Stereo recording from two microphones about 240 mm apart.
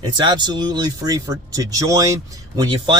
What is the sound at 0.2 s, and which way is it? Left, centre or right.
Speech, centre.